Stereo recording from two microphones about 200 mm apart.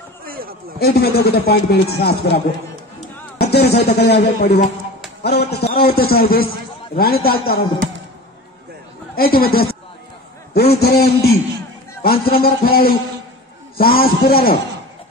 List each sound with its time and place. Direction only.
0.2 s a sound: 50° right (ahead or behind)
0.7 s a man's voice: 50° left (ahead or behind)
9.1 s a man's voice: 50° left (ahead or behind)